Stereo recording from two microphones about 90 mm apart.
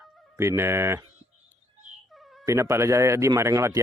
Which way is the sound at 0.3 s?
30° right (ahead or behind).